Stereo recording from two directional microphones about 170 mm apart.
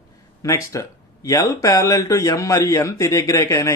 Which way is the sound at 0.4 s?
20° left (ahead or behind).